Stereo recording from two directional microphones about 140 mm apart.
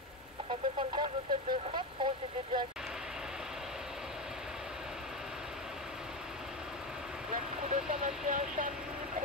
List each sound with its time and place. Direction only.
0.5 s speech: 40° right (ahead or behind)
7.6 s speech: 75° right (ahead or behind)